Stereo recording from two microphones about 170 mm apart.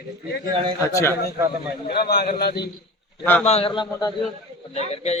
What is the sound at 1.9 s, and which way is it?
Speech, 65° left (ahead or behind).